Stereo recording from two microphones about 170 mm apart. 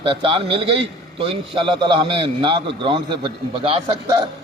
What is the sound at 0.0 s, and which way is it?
A man's voice, 30° right (ahead or behind).